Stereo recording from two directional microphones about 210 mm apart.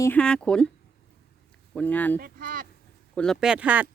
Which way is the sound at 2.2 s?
40° right (ahead or behind).